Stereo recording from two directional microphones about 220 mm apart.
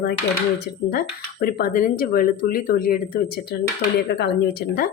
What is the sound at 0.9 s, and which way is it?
A woman's voice, 45° left (ahead or behind).